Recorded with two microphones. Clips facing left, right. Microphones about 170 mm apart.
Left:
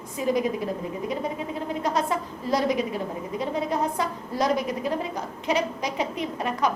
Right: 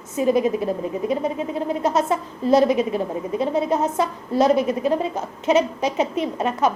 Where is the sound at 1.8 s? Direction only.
20° right (ahead or behind).